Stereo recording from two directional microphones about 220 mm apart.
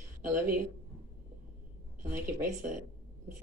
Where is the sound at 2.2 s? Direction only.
10° right (ahead or behind).